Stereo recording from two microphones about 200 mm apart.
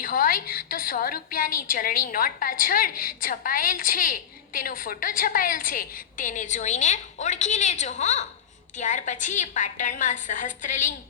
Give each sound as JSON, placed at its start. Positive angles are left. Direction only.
{"t": 0.0, "sound": "a woman's voice", "side_deg": 45}